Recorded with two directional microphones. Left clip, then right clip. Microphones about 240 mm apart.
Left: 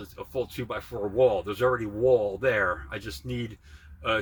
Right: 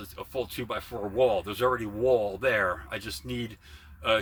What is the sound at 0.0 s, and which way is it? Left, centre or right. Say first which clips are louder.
Speech: left 1 dB; centre.